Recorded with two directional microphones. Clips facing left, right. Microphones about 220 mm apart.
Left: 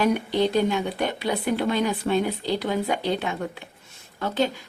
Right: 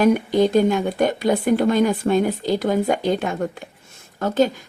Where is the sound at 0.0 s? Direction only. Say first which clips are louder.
Right 5 dB; 45° right (ahead or behind).